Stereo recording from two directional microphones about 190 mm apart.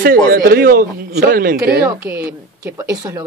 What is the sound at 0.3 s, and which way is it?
A man's voice, 50° right (ahead or behind).